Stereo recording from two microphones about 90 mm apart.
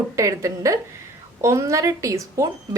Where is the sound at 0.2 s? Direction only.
35° right (ahead or behind).